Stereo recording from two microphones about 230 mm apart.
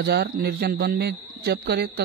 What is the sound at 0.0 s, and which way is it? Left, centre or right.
Speech, right.